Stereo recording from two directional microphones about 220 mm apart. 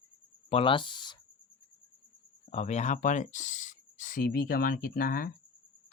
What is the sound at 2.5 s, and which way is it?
Speech, 30° left (ahead or behind).